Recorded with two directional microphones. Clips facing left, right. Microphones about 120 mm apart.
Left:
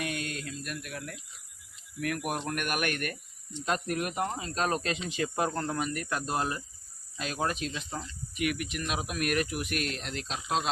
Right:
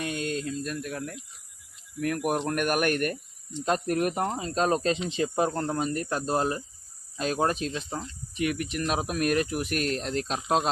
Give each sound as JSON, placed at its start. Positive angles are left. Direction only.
{"t": 0.0, "sound": "speech", "side_deg": -30}